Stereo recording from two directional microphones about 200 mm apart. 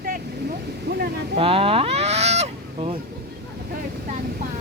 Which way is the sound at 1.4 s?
25° right (ahead or behind).